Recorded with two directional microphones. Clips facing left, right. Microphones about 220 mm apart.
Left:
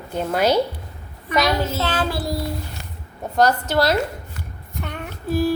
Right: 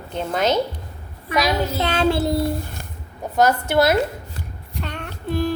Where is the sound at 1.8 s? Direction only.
25° right (ahead or behind).